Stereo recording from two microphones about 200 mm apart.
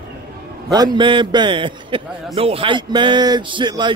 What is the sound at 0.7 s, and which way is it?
A man's voice, 20° right (ahead or behind).